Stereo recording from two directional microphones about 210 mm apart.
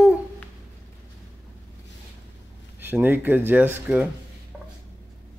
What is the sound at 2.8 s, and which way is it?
Speech, 10° right (ahead or behind).